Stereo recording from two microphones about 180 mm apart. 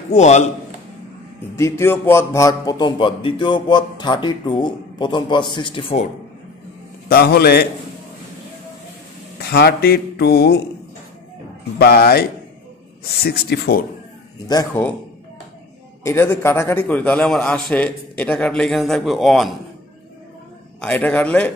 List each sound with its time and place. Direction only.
0.1 s a man's voice: 40° left (ahead or behind)
1.6 s speech: 15° left (ahead or behind); by 6.0 s 30° left (ahead or behind)
7.1 s speech: 60° left (ahead or behind)
9.4 s speech: 65° left (ahead or behind)
11.8 s speech: 60° left (ahead or behind)
14.5 s a man's voice: 15° left (ahead or behind)
16.0 s a man's voice: 15° left (ahead or behind)
20.8 s a man's voice: 5° left (ahead or behind)